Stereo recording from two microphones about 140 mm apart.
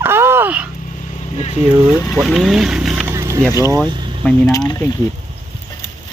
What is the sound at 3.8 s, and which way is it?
Vehicle, 35° right (ahead or behind).